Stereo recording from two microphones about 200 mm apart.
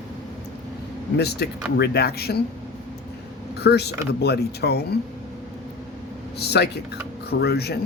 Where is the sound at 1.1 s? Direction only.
55° left (ahead or behind).